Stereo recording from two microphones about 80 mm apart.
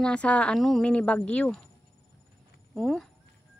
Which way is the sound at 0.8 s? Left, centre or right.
Centre.